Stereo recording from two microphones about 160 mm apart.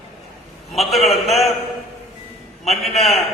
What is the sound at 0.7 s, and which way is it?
Speech, centre (ahead or behind).